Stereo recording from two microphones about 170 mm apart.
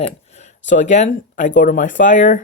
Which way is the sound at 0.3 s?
40° left (ahead or behind).